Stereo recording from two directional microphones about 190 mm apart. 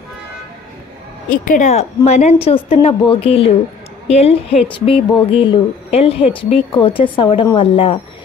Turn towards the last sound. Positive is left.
turn(degrees=30)  # may be behind; listen again after turning